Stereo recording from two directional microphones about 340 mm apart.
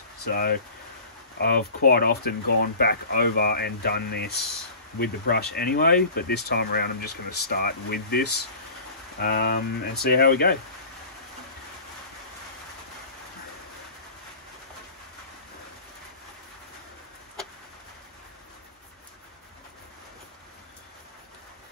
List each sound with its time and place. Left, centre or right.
0.2 s speech: left